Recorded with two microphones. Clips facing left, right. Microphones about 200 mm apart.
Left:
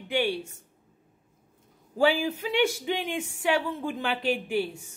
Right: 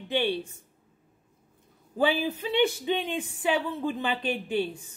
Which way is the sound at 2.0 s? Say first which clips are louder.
Left 2 dB; 10° left (ahead or behind).